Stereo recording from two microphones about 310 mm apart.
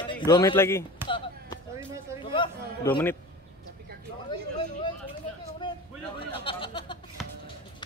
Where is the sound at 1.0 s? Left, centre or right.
Centre.